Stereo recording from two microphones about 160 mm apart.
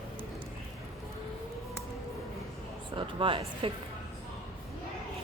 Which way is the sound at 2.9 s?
30° right (ahead or behind).